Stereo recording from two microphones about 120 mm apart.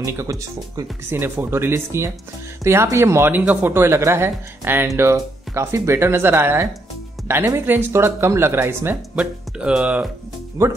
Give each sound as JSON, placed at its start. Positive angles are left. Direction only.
{"t": 0.0, "sound": "speech", "side_deg": -25}
{"t": 9.1, "sound": "speech", "side_deg": -10}
{"t": 10.6, "sound": "speech", "side_deg": -25}